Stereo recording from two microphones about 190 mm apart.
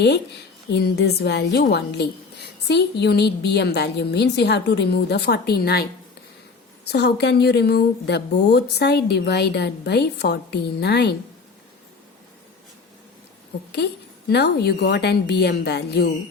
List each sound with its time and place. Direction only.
0.7 s a woman's voice: 60° left (ahead or behind)
6.8 s a woman's voice: 60° left (ahead or behind)
13.7 s a woman's voice: 60° left (ahead or behind)